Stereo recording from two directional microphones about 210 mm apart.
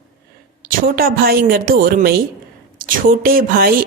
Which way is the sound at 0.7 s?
45° right (ahead or behind).